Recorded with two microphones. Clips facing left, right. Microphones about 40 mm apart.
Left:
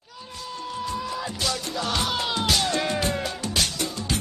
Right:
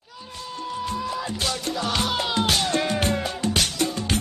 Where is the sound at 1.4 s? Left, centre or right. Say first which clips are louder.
Even; right.